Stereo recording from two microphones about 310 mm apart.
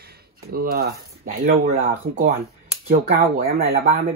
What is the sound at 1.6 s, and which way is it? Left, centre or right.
Speech, right.